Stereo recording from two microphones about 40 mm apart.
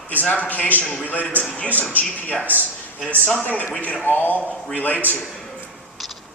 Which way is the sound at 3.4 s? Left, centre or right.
Left.